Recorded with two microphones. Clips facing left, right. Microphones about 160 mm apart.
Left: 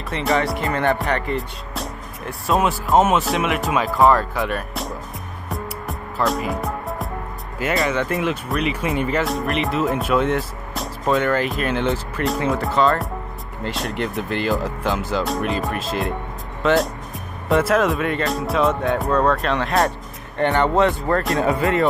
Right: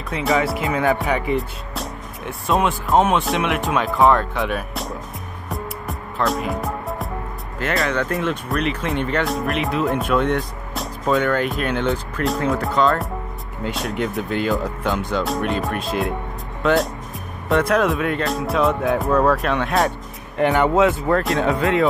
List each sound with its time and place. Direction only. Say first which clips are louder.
0.1 s speech: right 1 dB; centre (ahead or behind)
5.5 s music: even; centre (ahead or behind)
7.5 s speech: left 1 dB; 5° left (ahead or behind)